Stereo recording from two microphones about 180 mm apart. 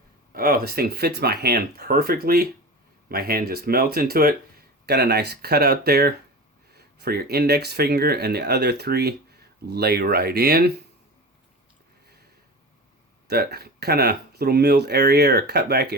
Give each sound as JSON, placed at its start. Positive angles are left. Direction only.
{"t": 0.3, "sound": "speech", "side_deg": -55}
{"t": 4.9, "sound": "speech", "side_deg": -70}
{"t": 13.2, "sound": "speech", "side_deg": -60}